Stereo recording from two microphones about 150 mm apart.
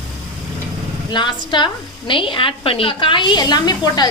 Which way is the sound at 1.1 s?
30° left (ahead or behind).